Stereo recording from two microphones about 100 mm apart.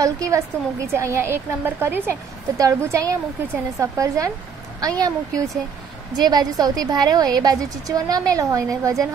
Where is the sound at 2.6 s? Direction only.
30° right (ahead or behind).